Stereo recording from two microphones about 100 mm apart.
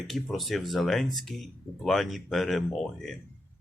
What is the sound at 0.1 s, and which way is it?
Speech, centre (ahead or behind).